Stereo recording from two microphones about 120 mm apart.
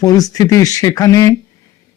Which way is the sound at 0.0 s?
30° left (ahead or behind).